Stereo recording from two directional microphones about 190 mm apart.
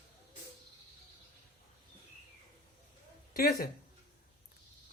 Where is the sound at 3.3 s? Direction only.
50° left (ahead or behind).